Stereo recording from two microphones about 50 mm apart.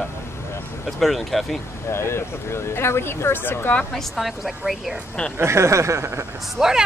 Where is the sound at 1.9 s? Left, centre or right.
Left.